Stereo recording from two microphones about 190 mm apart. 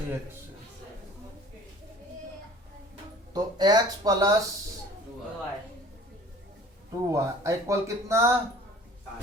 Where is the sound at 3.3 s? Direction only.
20° right (ahead or behind).